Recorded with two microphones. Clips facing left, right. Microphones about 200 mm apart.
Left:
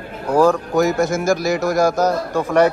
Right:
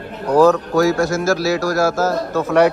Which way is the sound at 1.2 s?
15° left (ahead or behind).